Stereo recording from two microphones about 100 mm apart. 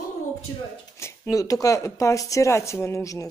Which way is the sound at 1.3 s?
35° left (ahead or behind).